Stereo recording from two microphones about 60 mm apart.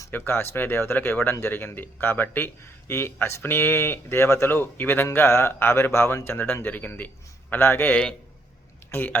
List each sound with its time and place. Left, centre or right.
0.1 s a man's voice: left